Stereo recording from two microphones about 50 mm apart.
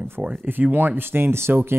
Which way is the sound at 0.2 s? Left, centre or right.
Right.